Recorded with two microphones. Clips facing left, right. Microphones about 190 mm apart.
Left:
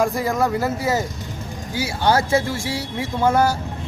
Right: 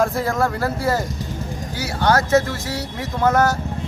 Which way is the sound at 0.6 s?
5° left (ahead or behind).